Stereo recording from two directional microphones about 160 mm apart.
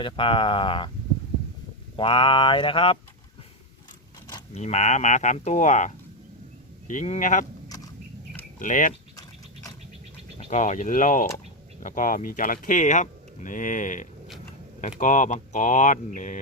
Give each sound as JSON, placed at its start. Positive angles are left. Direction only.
{"t": 0.0, "sound": "speech", "side_deg": 30}
{"t": 2.0, "sound": "speech", "side_deg": 30}
{"t": 4.5, "sound": "speech", "side_deg": 45}
{"t": 8.5, "sound": "speech", "side_deg": 55}
{"t": 10.3, "sound": "speech", "side_deg": 45}